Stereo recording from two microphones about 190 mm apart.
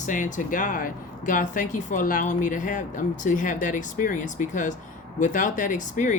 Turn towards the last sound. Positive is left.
turn(degrees=40)  # may be behind; listen again after turning